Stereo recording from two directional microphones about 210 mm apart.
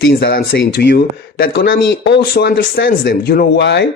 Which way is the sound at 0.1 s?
55° left (ahead or behind).